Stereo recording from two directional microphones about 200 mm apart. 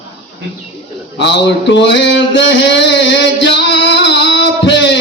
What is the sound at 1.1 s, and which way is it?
Mantra, 60° left (ahead or behind).